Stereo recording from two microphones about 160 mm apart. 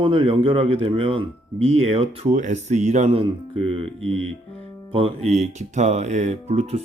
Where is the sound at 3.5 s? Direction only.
35° right (ahead or behind).